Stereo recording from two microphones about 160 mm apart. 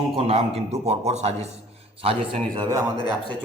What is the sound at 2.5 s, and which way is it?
Speech, 20° right (ahead or behind).